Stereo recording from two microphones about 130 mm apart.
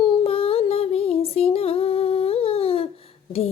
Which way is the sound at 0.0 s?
45° left (ahead or behind).